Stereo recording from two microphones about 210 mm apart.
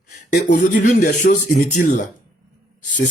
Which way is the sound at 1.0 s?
35° left (ahead or behind).